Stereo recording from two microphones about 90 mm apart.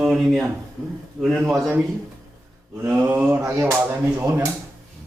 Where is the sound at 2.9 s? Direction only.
20° right (ahead or behind).